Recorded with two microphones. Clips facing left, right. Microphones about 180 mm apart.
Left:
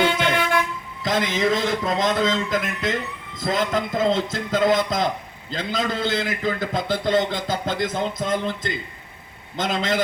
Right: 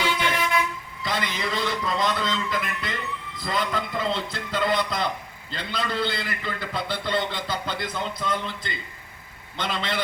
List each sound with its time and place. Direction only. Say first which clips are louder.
0.0 s toot: left 5 dB; 60° left (ahead or behind)
1.0 s a man's voice: left 7 dB; 45° left (ahead or behind)